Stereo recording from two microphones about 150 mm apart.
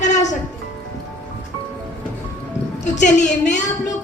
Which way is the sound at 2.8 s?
55° left (ahead or behind).